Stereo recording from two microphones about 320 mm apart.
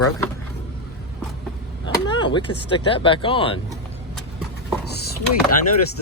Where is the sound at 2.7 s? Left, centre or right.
Centre.